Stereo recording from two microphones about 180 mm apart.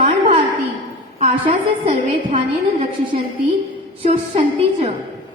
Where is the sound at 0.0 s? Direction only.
35° right (ahead or behind).